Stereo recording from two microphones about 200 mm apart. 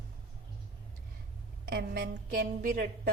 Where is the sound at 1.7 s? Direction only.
50° right (ahead or behind).